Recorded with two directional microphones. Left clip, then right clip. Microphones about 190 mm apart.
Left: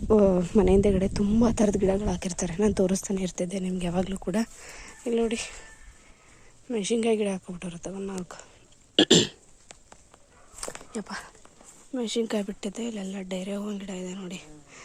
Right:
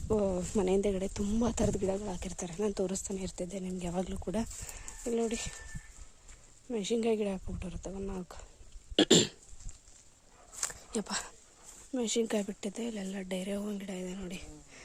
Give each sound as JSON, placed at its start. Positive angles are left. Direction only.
{"t": 0.1, "sound": "a woman's voice", "side_deg": 20}
{"t": 6.7, "sound": "a woman's voice", "side_deg": 0}
{"t": 10.9, "sound": "speech", "side_deg": -25}
{"t": 11.9, "sound": "a woman's voice", "side_deg": -15}